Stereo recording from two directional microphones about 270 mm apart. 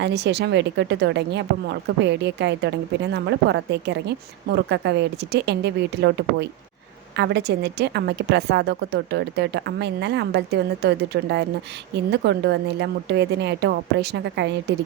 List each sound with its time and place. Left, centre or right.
0.0 s a woman's voice: right